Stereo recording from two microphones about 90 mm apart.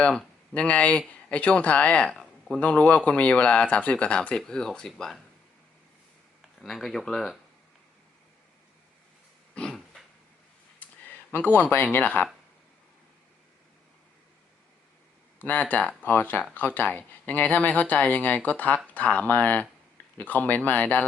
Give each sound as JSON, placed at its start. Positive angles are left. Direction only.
{"t": 0.5, "sound": "speech", "side_deg": 15}
{"t": 2.6, "sound": "speech", "side_deg": 15}
{"t": 6.4, "sound": "speech", "side_deg": 0}
{"t": 9.6, "sound": "dog", "side_deg": 10}
{"t": 10.8, "sound": "speech", "side_deg": 20}
{"t": 15.4, "sound": "speech", "side_deg": 20}